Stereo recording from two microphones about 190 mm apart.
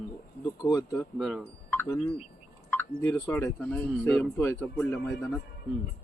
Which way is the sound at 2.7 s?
10° left (ahead or behind).